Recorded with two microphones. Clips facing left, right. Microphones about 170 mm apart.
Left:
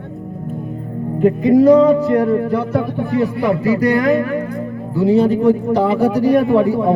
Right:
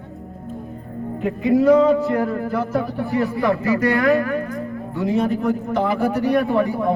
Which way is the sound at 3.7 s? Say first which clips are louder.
Left 5 dB; 35° left (ahead or behind).